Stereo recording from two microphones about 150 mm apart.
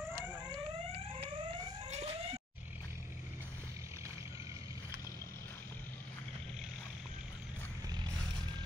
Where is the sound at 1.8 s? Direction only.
45° right (ahead or behind).